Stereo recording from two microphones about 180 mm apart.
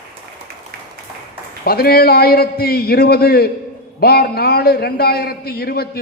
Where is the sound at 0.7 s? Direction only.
55° right (ahead or behind).